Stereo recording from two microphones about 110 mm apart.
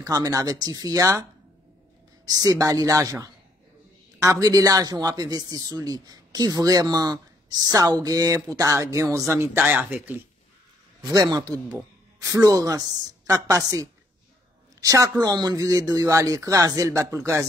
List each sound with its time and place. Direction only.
0.0 s speech: 35° right (ahead or behind)
2.2 s speech: 35° right (ahead or behind)
9.7 s speech: 15° right (ahead or behind)
11.0 s speech: 40° right (ahead or behind)